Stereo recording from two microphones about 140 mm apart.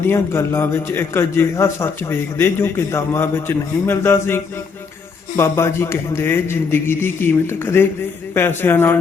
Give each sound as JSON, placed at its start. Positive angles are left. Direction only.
{"t": 0.0, "sound": "a man's voice", "side_deg": 20}